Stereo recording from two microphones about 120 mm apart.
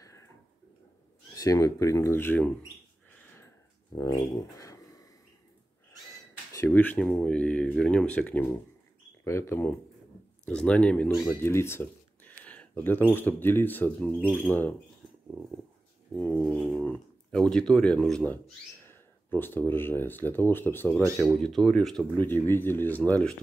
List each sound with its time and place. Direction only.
1.3 s speech: 30° left (ahead or behind)
3.9 s dog: 30° left (ahead or behind)
4.6 s a sound: 30° left (ahead or behind)
6.7 s speech: 15° left (ahead or behind)
10.4 s speech: 5° left (ahead or behind)
11.1 s a sound: 20° left (ahead or behind)
13.1 s speech: 20° left (ahead or behind)
16.2 s speech: 15° left (ahead or behind)
16.4 s speech: centre (ahead or behind); by 21.0 s 15° left (ahead or behind)
21.2 s speech: 5° left (ahead or behind)
22.1 s speech: 15° left (ahead or behind)